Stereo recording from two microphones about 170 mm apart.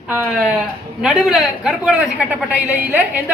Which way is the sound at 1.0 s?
5° right (ahead or behind).